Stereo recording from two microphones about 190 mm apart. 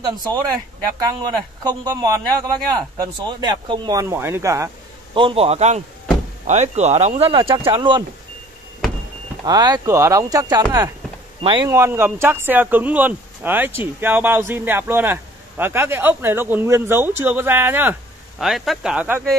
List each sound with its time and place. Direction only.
0.1 s a man's voice: 20° right (ahead or behind)
5.1 s speech: 30° right (ahead or behind)
9.4 s a man's voice: 20° right (ahead or behind)
11.7 s speech: 15° right (ahead or behind)